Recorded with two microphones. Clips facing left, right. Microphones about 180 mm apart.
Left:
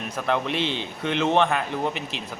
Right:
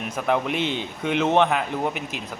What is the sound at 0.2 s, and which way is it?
A man's voice, 10° right (ahead or behind).